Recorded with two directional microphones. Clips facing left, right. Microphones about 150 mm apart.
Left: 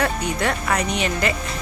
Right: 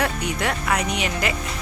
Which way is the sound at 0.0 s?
10° right (ahead or behind).